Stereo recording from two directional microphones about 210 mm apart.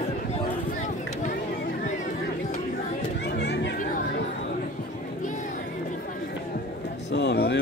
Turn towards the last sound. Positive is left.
turn(degrees=55)  # may be behind; listen again after turning